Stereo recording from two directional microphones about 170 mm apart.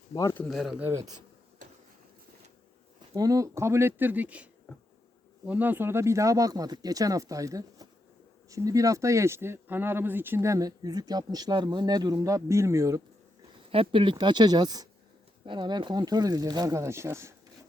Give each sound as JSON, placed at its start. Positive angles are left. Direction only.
{"t": 0.1, "sound": "speech", "side_deg": 30}
{"t": 0.3, "sound": "speech", "side_deg": 0}
{"t": 0.8, "sound": "speech", "side_deg": -15}
{"t": 3.2, "sound": "speech", "side_deg": -20}
{"t": 5.5, "sound": "speech", "side_deg": -10}
{"t": 13.7, "sound": "speech", "side_deg": -30}